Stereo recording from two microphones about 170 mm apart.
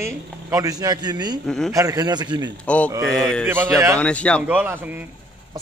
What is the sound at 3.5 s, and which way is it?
Speech, 15° right (ahead or behind).